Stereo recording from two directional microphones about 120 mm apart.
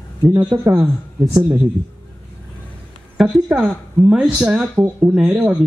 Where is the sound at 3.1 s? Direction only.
Centre (ahead or behind).